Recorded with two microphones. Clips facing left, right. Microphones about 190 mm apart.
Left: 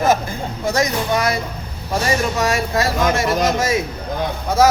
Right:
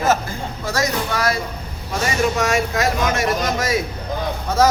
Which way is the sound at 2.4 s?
35° left (ahead or behind).